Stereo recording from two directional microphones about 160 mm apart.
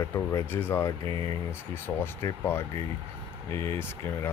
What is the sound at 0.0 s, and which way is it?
Speech, 20° left (ahead or behind).